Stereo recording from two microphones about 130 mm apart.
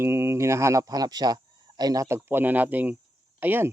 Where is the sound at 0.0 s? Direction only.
20° right (ahead or behind).